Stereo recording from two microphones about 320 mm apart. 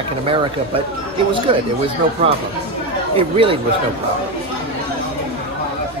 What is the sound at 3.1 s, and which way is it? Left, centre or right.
Speech, centre.